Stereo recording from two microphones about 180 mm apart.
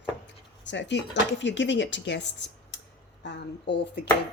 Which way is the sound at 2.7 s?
80° left.